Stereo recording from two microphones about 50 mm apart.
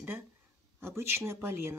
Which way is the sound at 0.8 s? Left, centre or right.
Right.